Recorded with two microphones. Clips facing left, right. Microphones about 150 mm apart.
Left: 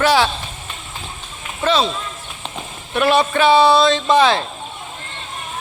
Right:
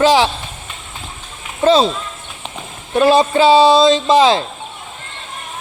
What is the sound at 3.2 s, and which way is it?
Speech, 20° right (ahead or behind).